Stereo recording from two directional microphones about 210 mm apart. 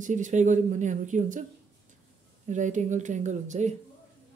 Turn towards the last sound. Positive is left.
turn(degrees=-35)  # may be behind; listen again after turning